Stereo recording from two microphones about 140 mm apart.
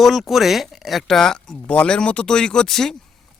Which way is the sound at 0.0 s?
Centre (ahead or behind).